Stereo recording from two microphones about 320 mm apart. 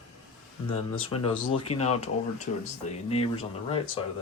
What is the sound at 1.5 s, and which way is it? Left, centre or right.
Speech, centre.